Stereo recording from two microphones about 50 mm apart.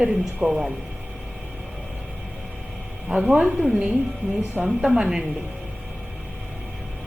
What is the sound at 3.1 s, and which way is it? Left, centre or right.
Speech, right.